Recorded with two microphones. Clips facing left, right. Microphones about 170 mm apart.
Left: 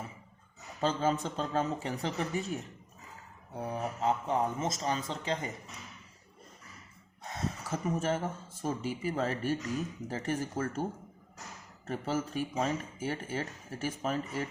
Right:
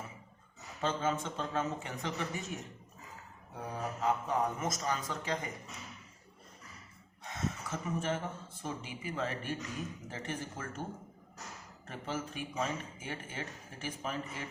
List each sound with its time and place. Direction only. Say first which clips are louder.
0.8 s a man's voice: left 4 dB; 35° left (ahead or behind)
7.3 s speech: left 2 dB; 35° left (ahead or behind)
11.9 s speech: left 6 dB; 40° left (ahead or behind)